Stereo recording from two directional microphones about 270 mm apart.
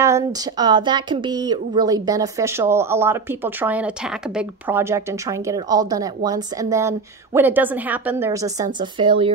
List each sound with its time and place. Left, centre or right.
0.0 s a woman's voice: centre